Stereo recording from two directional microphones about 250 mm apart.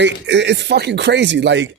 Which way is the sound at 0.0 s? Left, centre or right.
Right.